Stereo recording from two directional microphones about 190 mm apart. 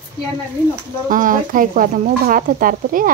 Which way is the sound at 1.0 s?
45° right (ahead or behind).